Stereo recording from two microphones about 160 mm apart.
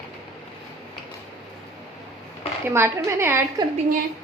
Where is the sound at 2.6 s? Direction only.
15° right (ahead or behind).